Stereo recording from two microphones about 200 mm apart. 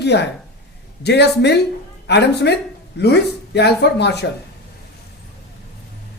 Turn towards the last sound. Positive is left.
turn(degrees=55)  # may be behind; listen again after turning